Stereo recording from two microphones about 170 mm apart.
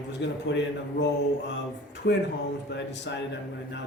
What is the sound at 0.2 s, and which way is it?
Speech, 90° left.